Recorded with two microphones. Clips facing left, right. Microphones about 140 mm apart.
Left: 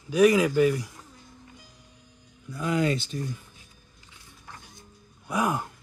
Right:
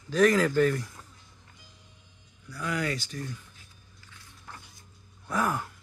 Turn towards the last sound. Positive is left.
turn(degrees=15)  # may be behind; listen again after turning